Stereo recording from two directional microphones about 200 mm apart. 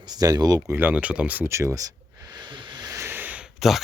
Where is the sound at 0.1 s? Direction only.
20° right (ahead or behind).